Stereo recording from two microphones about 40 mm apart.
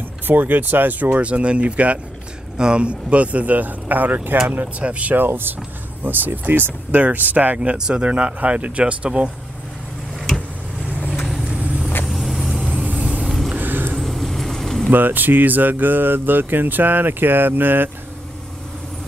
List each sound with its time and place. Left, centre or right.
0.3 s speech: right
1.1 s speech: right
2.5 s speech: right
4.8 s speech: right
5.1 s speech: right
7.7 s speech: centre
8.0 s speech: right
11.1 s vehicle: centre
11.4 s vehicle: right
12.1 s vehicle: centre
12.7 s vehicle: right
13.6 s vehicle: right
13.9 s vehicle: centre
14.9 s speech: right